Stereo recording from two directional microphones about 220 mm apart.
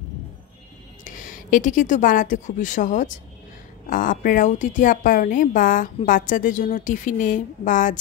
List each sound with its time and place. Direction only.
1.0 s a woman's voice: 35° left (ahead or behind)